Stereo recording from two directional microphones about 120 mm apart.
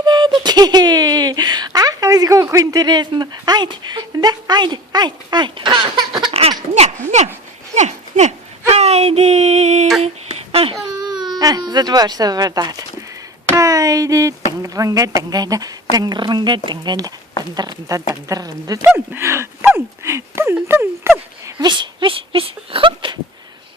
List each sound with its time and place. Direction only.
0.0 s speech: 40° right (ahead or behind)
6.3 s a sound: 55° right (ahead or behind)
7.8 s dog: 70° right (ahead or behind)
8.7 s a sound: 65° right (ahead or behind)
10.8 s speech: 35° right (ahead or behind)
18.9 s speech: 15° right (ahead or behind)
21.4 s speech: 35° right (ahead or behind)